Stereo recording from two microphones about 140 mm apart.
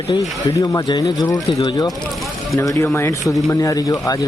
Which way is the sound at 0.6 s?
25° left (ahead or behind).